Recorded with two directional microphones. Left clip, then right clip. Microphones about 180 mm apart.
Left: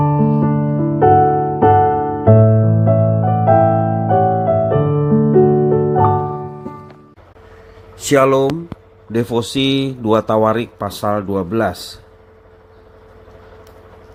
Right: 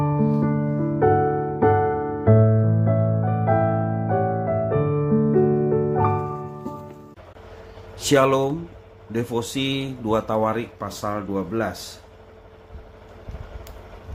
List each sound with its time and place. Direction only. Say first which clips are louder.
0.0 s music: left 7 dB; 45° left (ahead or behind)
6.2 s music: left 6 dB; 25° left (ahead or behind)
7.9 s speech: left 6 dB; 15° left (ahead or behind)
9.1 s speech: left 8 dB; 35° left (ahead or behind)